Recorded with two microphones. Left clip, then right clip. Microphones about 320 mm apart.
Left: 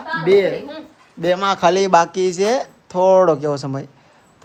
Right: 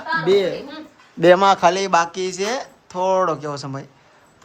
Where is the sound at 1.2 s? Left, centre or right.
Right.